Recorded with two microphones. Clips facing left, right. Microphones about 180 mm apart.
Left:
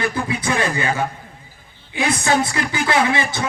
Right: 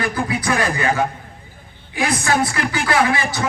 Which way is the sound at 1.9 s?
25° left (ahead or behind).